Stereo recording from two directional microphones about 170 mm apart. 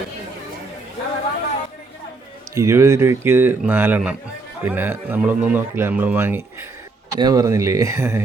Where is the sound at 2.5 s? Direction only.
15° right (ahead or behind).